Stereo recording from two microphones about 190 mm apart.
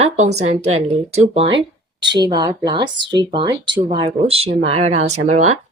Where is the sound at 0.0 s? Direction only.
35° right (ahead or behind).